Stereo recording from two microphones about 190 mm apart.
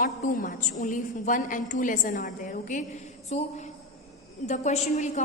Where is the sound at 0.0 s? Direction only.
45° left (ahead or behind).